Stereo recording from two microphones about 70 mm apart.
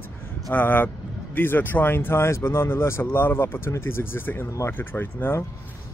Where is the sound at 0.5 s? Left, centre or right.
Left.